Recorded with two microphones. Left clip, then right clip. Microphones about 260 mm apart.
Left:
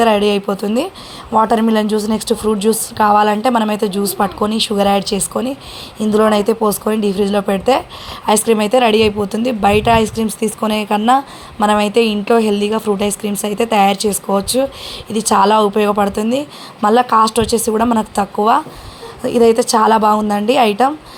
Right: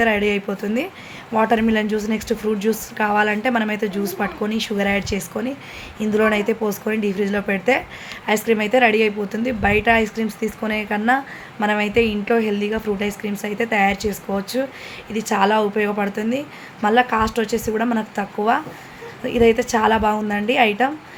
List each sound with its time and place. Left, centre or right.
0.0 s a woman's voice: centre